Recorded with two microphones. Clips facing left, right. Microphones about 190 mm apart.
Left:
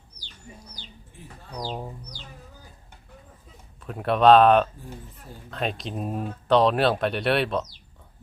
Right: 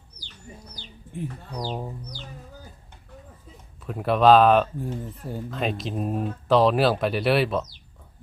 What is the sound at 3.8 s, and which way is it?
Speech, centre (ahead or behind).